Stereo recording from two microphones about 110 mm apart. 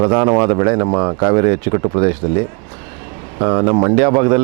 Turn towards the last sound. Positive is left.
turn(degrees=-30)  # may be behind; listen again after turning